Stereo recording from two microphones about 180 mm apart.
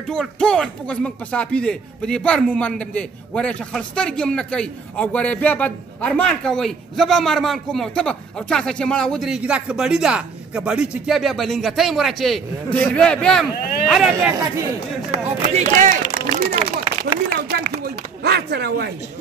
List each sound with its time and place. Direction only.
0.1 s speech: 5° left (ahead or behind)
15.0 s speech: 40° right (ahead or behind)
17.5 s speech: 60° right (ahead or behind)